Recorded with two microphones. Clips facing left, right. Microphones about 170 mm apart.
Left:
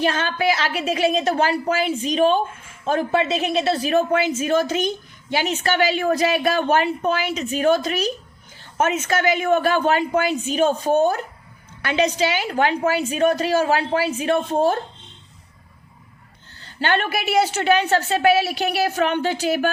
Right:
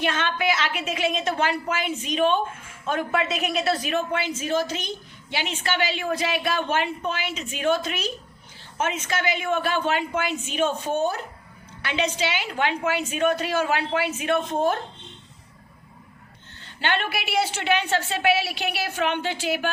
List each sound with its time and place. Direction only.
0.0 s a woman's voice: 35° left (ahead or behind)
16.6 s a woman's voice: 40° left (ahead or behind)